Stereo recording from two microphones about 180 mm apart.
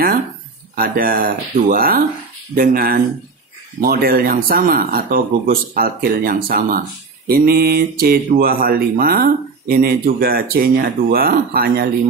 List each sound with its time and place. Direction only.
0.7 s speech: 55° right (ahead or behind)